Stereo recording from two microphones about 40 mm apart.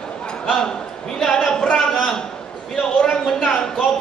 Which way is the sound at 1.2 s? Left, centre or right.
Centre.